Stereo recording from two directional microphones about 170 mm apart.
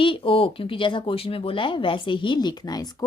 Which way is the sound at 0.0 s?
30° left (ahead or behind).